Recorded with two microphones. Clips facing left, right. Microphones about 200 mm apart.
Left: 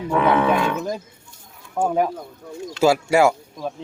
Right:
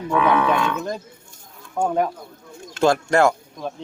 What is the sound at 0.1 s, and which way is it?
Speech, 25° left (ahead or behind).